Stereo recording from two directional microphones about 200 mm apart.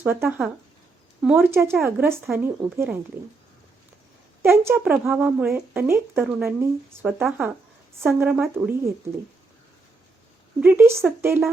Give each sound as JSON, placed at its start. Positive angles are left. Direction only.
{"t": 0.0, "sound": "speech", "side_deg": -10}
{"t": 4.4, "sound": "speech", "side_deg": -10}
{"t": 10.6, "sound": "speech", "side_deg": -10}